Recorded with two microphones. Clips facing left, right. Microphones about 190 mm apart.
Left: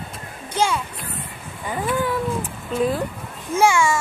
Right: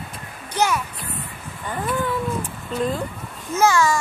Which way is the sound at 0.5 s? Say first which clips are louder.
Even; 25° left (ahead or behind).